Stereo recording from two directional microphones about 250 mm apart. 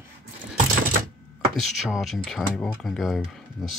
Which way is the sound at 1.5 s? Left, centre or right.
Centre.